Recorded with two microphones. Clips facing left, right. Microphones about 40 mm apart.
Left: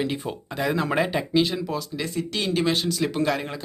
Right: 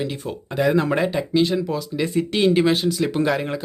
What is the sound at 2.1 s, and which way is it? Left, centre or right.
Speech, right.